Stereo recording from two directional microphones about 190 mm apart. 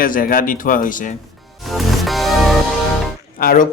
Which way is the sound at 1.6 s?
Centre (ahead or behind).